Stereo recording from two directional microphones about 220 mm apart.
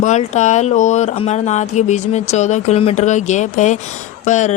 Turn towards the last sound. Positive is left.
turn(degrees=35)  # may be behind; listen again after turning